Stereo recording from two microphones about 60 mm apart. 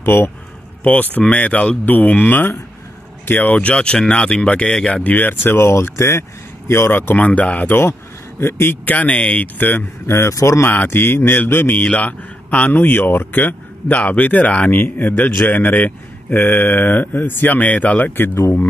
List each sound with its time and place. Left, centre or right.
0.0 s speech: left
0.8 s speech: left
7.2 s speech: left
8.4 s speech: left
8.8 s speech: left
9.6 s speech: left
10.0 s speech: left
10.7 s speech: left
11.8 s speech: left